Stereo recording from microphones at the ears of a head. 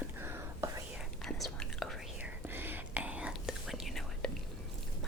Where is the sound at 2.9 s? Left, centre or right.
Centre.